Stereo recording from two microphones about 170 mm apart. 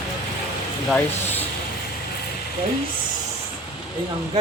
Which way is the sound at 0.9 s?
10° left (ahead or behind).